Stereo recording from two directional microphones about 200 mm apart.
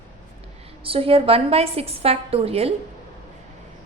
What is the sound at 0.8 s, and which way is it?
A woman's voice, 30° right (ahead or behind).